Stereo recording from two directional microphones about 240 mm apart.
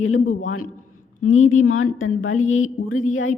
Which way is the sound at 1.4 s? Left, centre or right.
Left.